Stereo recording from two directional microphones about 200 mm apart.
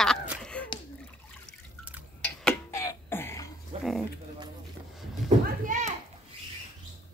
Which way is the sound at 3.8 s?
Centre (ahead or behind).